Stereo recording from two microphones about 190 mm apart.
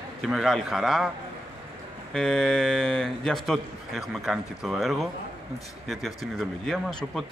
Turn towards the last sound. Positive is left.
turn(degrees=0)  # may be behind; listen again after turning